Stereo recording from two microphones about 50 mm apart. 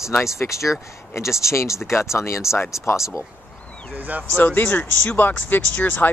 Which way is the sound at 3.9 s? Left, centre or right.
Right.